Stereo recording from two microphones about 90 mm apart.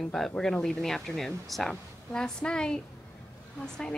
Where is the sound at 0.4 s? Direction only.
5° left (ahead or behind).